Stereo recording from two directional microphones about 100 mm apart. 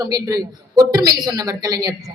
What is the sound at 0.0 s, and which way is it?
A woman's voice, 35° right (ahead or behind).